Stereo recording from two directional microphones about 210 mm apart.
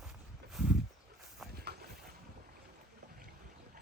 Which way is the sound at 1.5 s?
50° right (ahead or behind).